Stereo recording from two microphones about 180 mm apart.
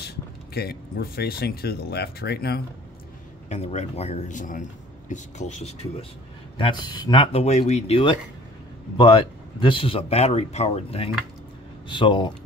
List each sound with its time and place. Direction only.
0.0 s speech: 60° left (ahead or behind)
3.4 s speech: 40° left (ahead or behind)